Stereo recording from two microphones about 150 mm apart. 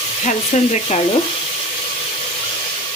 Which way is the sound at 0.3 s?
50° left (ahead or behind).